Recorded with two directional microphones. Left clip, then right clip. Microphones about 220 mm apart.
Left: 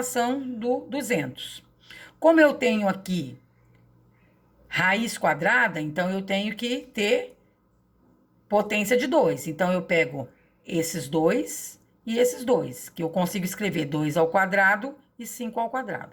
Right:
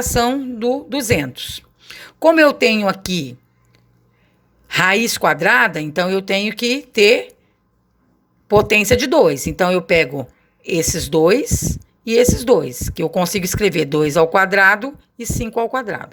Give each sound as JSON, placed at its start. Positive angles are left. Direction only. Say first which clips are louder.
{"t": 0.1, "sound": "speech", "louder": "right 11 dB", "side_deg": -45}
{"t": 4.7, "sound": "speech", "louder": "right 8 dB", "side_deg": -50}
{"t": 8.4, "sound": "speech", "louder": "right 10 dB", "side_deg": -45}